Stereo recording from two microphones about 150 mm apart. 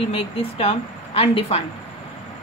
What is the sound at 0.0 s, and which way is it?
A woman's voice, 40° left (ahead or behind).